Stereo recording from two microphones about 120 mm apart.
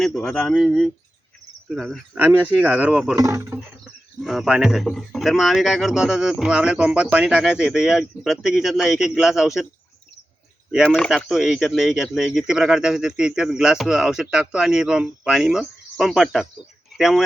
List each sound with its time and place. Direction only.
0.0 s speech: 5° left (ahead or behind)
2.1 s speech: 15° right (ahead or behind)
3.2 s speech: 25° right (ahead or behind)
4.2 s speech: 5° right (ahead or behind)
10.8 s speech: 5° left (ahead or behind)